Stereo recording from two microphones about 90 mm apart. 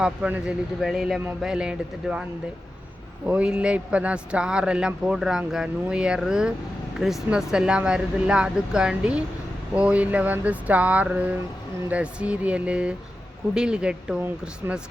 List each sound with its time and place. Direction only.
0.0 s a man's voice: 10° right (ahead or behind)
3.2 s a man's voice: 10° right (ahead or behind)